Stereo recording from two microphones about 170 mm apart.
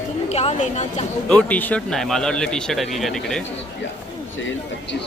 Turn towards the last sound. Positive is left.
turn(degrees=0)  # may be behind; listen again after turning